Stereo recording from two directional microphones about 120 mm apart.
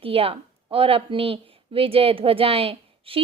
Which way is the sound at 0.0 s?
50° right (ahead or behind).